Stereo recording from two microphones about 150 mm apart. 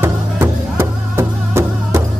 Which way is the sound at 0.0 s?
15° right (ahead or behind).